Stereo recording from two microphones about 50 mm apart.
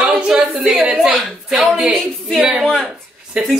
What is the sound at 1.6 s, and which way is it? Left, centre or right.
Speech, centre.